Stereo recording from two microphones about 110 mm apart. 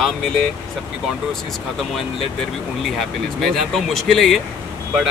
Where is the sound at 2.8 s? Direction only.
Centre (ahead or behind).